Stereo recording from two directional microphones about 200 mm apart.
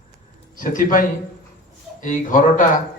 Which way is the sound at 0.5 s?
45° left (ahead or behind).